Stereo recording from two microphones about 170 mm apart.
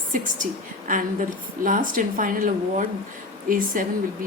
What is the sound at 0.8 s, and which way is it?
A woman's voice, 50° right (ahead or behind).